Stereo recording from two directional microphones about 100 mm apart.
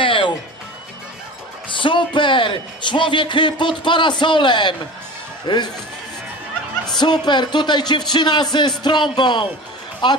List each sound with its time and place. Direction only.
0.0 s music: 60° left (ahead or behind)
1.8 s a man's voice: 55° left (ahead or behind)
7.0 s a man's voice: 50° left (ahead or behind)